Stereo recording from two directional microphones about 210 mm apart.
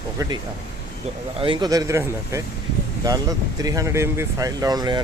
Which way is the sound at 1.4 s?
20° right (ahead or behind).